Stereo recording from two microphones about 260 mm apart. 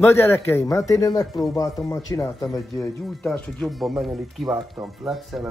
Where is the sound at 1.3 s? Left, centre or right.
Centre.